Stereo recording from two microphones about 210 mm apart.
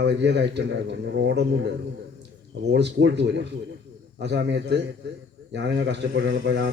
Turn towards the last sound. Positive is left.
turn(degrees=-55)  # may be behind; listen again after turning